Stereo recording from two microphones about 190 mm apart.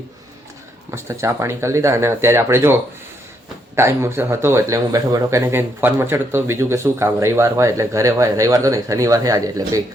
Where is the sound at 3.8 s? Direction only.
15° right (ahead or behind).